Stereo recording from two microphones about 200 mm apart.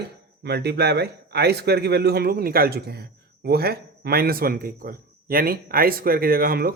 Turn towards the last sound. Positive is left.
turn(degrees=-45)  # may be behind; listen again after turning